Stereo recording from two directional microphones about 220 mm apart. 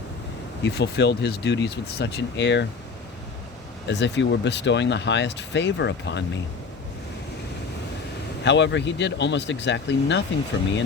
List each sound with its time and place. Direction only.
0.6 s speech: 50° left (ahead or behind)
3.8 s speech: 55° left (ahead or behind)
8.4 s speech: 55° left (ahead or behind)